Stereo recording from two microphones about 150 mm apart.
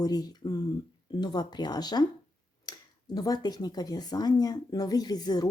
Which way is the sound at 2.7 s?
25° left (ahead or behind).